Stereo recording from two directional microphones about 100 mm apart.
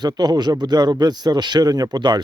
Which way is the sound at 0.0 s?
45° right (ahead or behind).